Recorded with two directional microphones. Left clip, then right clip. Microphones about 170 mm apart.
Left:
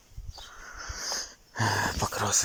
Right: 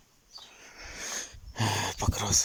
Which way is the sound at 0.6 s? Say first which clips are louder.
Left 4 dB; 25° right (ahead or behind).